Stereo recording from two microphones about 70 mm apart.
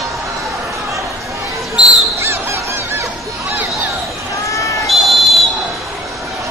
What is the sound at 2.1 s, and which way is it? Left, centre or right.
Honk, right.